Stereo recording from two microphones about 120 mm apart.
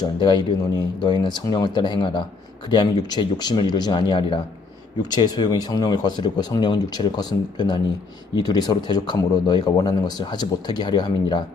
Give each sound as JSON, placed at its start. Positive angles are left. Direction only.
{"t": 0.0, "sound": "speech", "side_deg": 40}